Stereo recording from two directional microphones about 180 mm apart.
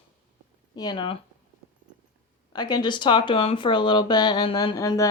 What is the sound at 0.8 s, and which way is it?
Speech, 25° left (ahead or behind).